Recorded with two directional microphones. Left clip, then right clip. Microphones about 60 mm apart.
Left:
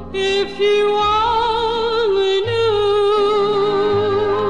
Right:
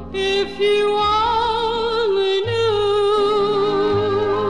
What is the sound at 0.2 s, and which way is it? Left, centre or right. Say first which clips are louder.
Music: left 2 dB; left.